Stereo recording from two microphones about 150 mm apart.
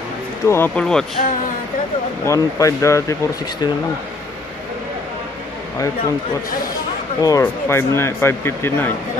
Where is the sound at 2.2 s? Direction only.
20° left (ahead or behind).